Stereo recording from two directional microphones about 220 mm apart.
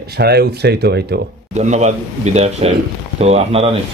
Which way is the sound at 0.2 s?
45° right (ahead or behind).